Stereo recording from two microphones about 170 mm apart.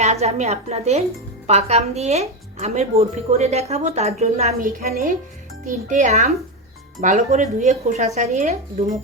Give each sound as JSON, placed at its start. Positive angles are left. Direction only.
{"t": 0.0, "sound": "a woman's voice", "side_deg": -40}
{"t": 4.8, "sound": "speech", "side_deg": -55}
{"t": 5.6, "sound": "speech", "side_deg": -45}